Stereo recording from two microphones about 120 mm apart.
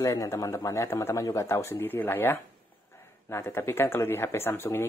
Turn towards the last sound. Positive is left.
turn(degrees=20)  # may be behind; listen again after turning